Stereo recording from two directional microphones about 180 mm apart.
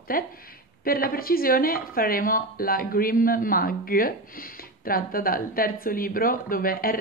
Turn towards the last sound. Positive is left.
turn(degrees=55)  # may be behind; listen again after turning